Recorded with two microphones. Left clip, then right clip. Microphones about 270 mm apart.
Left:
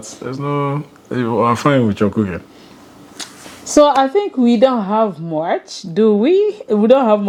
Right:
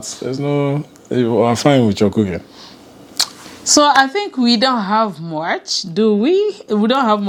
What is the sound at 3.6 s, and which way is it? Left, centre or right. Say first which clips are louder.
A woman's voice: even; right.